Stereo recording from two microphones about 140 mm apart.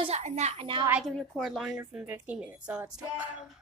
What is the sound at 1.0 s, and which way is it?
A woman's voice, centre (ahead or behind).